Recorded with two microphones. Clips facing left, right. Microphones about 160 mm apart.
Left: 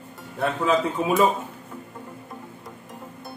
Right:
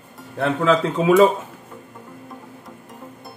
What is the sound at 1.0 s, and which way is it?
Speech, 90° right.